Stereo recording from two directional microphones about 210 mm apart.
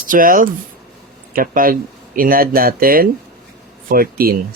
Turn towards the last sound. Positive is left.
turn(degrees=-45)  # may be behind; listen again after turning